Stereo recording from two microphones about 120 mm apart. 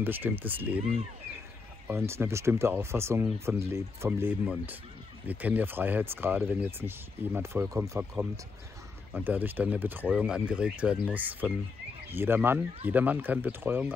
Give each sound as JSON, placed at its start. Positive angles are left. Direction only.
{"t": 0.0, "sound": "speech", "side_deg": -15}
{"t": 1.9, "sound": "speech", "side_deg": -20}
{"t": 9.1, "sound": "speech", "side_deg": -15}